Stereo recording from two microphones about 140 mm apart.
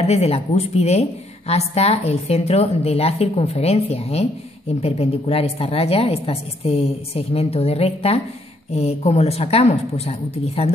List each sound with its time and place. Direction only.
0.0 s a woman's voice: 50° left (ahead or behind)